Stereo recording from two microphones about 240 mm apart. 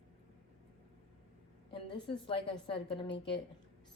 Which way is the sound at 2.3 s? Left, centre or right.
Left.